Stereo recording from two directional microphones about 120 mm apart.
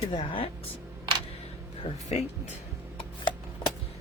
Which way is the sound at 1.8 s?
50° left (ahead or behind).